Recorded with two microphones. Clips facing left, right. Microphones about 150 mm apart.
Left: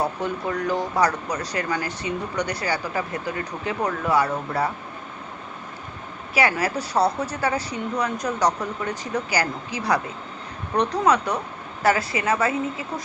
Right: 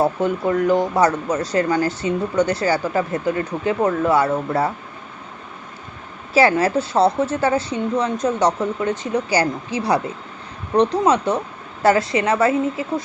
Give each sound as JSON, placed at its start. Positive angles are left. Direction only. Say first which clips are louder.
{"t": 0.0, "sound": "speech", "louder": "right 7 dB", "side_deg": -25}
{"t": 6.3, "sound": "speech", "louder": "right 7 dB", "side_deg": -25}